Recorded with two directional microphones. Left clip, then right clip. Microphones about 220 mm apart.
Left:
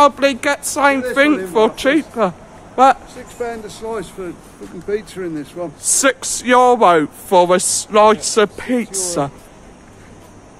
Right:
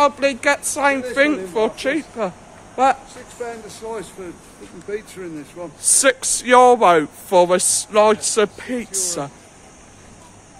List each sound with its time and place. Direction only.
0.0 s a woman's voice: 5° left (ahead or behind)
3.3 s speech: 40° left (ahead or behind)
5.9 s speech: 5° left (ahead or behind)